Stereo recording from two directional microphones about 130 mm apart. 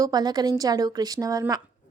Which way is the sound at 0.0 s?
30° right (ahead or behind).